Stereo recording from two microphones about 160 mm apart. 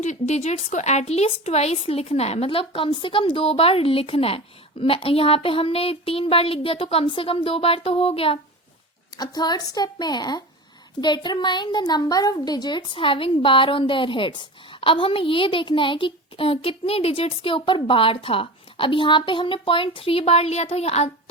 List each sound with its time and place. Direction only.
0.0 s a child's voice: 45° left (ahead or behind)
9.1 s a child's voice: 25° left (ahead or behind); by 21.1 s 40° left (ahead or behind)